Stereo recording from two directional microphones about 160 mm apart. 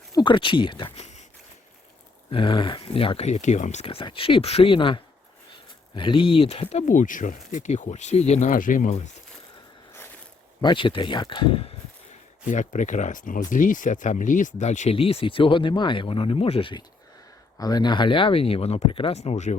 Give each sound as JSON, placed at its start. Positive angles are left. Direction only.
{"t": 0.1, "sound": "speech", "side_deg": 30}
{"t": 0.9, "sound": "a sound", "side_deg": 45}
{"t": 2.3, "sound": "speech", "side_deg": 30}
{"t": 10.6, "sound": "speech", "side_deg": 30}
{"t": 12.5, "sound": "speech", "side_deg": 50}